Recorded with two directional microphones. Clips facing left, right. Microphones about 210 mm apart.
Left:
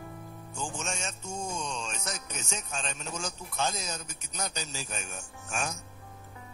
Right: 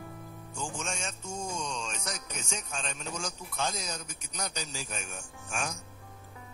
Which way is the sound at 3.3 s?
25° left (ahead or behind).